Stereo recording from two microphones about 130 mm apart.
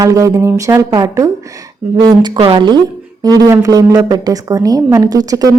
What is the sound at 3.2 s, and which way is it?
Speech, 30° right (ahead or behind).